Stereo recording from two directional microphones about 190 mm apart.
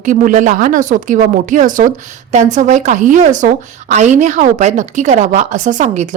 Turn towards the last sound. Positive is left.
turn(degrees=-40)  # may be behind; listen again after turning